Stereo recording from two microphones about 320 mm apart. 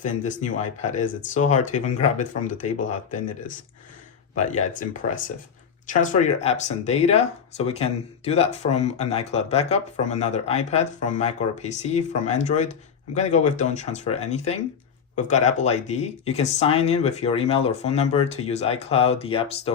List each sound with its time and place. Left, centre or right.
0.0 s speech: left